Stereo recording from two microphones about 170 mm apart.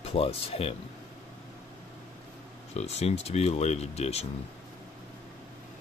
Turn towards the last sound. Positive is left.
turn(degrees=40)  # may be behind; listen again after turning